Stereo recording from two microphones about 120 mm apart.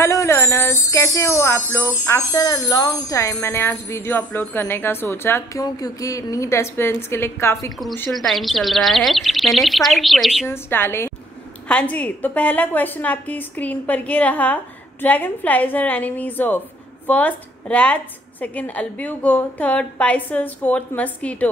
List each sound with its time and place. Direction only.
0.0 s music: 25° left (ahead or behind)
1.7 s jingle bell: 20° left (ahead or behind)
5.6 s jingle bell: 30° left (ahead or behind)
8.1 s speech: centre (ahead or behind)
10.5 s jingle bell: 20° left (ahead or behind)
11.6 s a woman's voice: 10° left (ahead or behind)